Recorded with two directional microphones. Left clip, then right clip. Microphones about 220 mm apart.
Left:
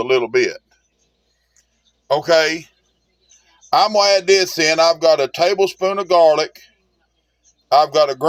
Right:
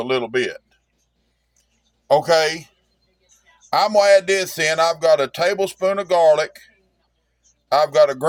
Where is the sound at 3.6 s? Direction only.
20° left (ahead or behind).